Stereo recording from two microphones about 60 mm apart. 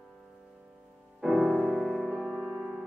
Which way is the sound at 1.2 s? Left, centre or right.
Centre.